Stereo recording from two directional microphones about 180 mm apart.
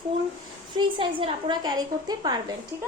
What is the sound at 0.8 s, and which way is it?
A woman's voice, 25° right (ahead or behind).